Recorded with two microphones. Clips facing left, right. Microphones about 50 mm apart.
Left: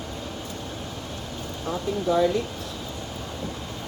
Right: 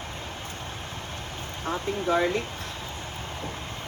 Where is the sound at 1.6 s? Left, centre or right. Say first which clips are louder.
Left 1 dB; right.